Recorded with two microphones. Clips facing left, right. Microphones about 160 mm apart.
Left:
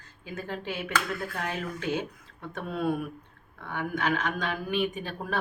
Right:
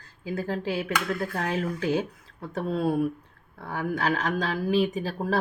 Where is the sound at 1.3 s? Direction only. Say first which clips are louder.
Right 5 dB; 35° right (ahead or behind).